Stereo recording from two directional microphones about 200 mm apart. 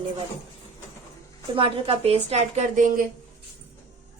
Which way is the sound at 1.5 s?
25° right (ahead or behind).